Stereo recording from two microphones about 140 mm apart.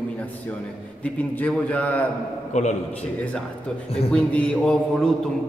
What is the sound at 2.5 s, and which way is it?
Speech, 55° left (ahead or behind).